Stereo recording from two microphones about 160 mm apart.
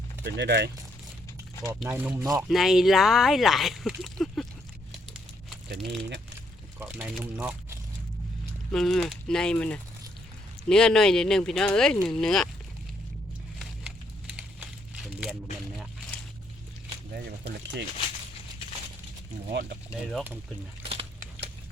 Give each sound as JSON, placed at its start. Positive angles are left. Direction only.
{"t": 0.3, "sound": "speech", "side_deg": -90}
{"t": 1.9, "sound": "speech", "side_deg": -15}
{"t": 2.3, "sound": "speech", "side_deg": 0}
{"t": 4.9, "sound": "a sound", "side_deg": 0}
{"t": 6.7, "sound": "speech", "side_deg": -10}
{"t": 8.7, "sound": "speech", "side_deg": 0}
{"t": 19.5, "sound": "speech", "side_deg": -90}
{"t": 20.9, "sound": "a sound", "side_deg": -40}